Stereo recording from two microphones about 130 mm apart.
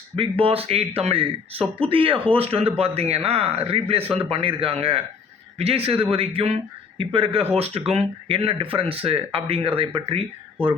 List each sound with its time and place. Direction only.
0.2 s speech: 45° right (ahead or behind)